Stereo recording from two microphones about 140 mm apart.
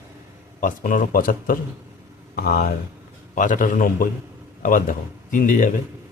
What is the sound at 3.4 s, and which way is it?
Speech, 70° left (ahead or behind).